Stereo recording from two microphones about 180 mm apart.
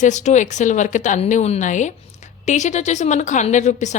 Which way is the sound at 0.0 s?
45° left (ahead or behind).